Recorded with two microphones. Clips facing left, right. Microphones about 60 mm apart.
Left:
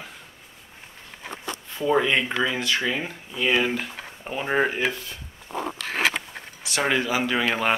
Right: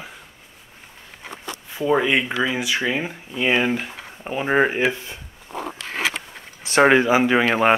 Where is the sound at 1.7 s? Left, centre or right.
Centre.